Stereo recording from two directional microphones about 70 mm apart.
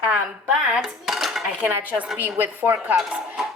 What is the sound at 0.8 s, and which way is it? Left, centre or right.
Cutlery, centre.